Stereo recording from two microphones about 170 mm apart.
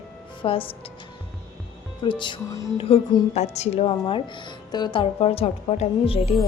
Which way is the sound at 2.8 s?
35° left (ahead or behind).